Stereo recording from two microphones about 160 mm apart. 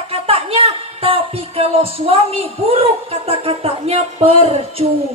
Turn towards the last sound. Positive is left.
turn(degrees=-40)  # may be behind; listen again after turning